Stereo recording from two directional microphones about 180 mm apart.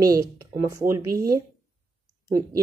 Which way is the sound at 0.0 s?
20° right (ahead or behind).